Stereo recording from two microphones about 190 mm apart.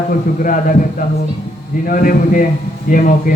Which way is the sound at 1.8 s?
45° left (ahead or behind).